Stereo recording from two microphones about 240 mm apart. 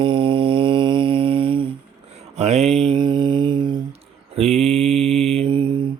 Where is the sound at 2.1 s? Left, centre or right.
Right.